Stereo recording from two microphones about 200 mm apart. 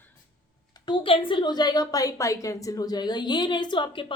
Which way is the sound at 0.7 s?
25° left (ahead or behind).